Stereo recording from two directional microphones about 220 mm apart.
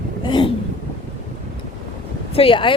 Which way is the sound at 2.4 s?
25° left (ahead or behind).